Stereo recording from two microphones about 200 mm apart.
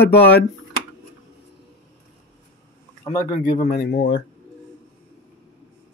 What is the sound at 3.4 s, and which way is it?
Speech, 45° left (ahead or behind).